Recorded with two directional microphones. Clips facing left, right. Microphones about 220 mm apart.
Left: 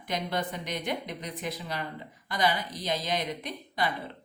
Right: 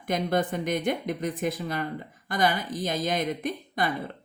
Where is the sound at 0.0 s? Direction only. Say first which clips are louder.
Right 6 dB; 50° right (ahead or behind).